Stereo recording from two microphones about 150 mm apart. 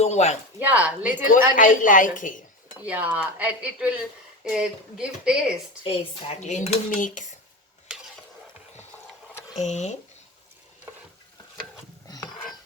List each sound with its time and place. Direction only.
0.0 s speech: 50° left (ahead or behind)
0.6 s speech: 10° right (ahead or behind)
1.3 s a woman's voice: 60° left (ahead or behind)
2.8 s speech: 10° right (ahead or behind)
5.8 s speech: 40° left (ahead or behind); by 7.3 s 60° left (ahead or behind)
9.6 s speech: 50° left (ahead or behind)
12.0 s a sound: 25° left (ahead or behind)